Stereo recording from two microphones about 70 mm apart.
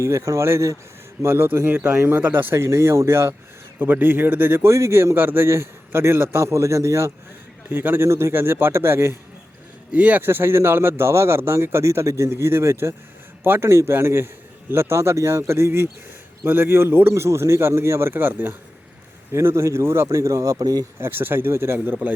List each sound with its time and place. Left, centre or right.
0.0 s a man's voice: right
2.6 s a man's voice: right
3.8 s a man's voice: right
7.7 s a man's voice: right
9.9 s speech: centre
10.2 s a man's voice: right
19.3 s a man's voice: right
20.1 s speech: right
21.0 s a man's voice: right